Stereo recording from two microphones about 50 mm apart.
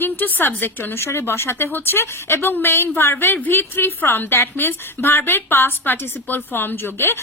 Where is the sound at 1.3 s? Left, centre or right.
Left.